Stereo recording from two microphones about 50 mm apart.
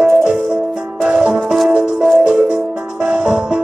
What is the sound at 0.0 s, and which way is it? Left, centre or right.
Music, centre.